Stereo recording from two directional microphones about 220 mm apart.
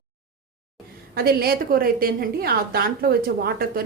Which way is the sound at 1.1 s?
45° right (ahead or behind).